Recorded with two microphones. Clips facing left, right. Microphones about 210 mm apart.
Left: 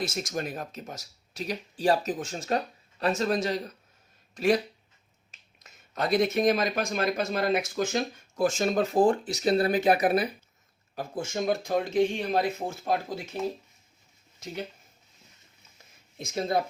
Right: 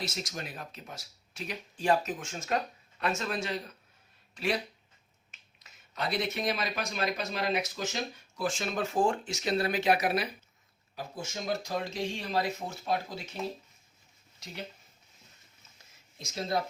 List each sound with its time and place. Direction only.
0.0 s speech: 50° left (ahead or behind)
5.6 s speech: 45° left (ahead or behind)
10.0 s speech: 50° left (ahead or behind)
16.1 s speech: 55° left (ahead or behind)